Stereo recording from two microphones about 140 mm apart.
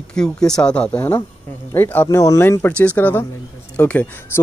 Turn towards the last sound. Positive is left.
turn(degrees=15)  # may be behind; listen again after turning